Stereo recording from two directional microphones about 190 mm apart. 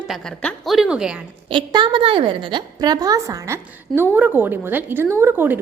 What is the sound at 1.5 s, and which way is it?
A woman's voice, 25° right (ahead or behind).